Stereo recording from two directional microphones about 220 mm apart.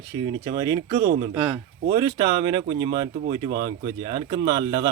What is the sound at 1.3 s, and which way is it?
Speech, 5° right (ahead or behind).